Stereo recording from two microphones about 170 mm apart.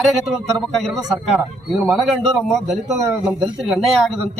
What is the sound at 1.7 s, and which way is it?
Speech, 5° right (ahead or behind).